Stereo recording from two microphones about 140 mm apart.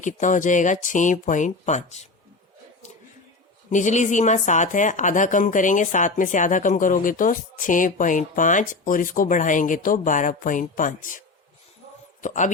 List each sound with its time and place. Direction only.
0.0 s speech: 65° left (ahead or behind)
3.7 s speech: 60° left (ahead or behind)
12.2 s speech: 60° left (ahead or behind)